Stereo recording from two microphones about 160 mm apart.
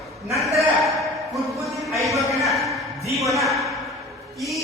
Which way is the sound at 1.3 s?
Centre (ahead or behind).